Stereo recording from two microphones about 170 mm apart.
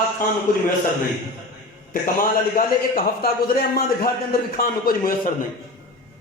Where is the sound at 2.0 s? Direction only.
55° left (ahead or behind).